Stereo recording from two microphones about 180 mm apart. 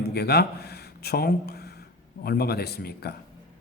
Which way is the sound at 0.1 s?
65° left (ahead or behind).